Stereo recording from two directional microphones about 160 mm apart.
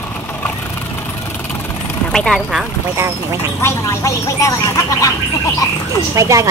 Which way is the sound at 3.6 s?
20° left (ahead or behind).